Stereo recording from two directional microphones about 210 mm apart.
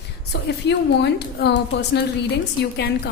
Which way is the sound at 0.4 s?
55° left (ahead or behind).